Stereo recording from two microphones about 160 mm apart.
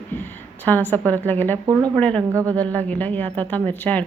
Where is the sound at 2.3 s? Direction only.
20° right (ahead or behind).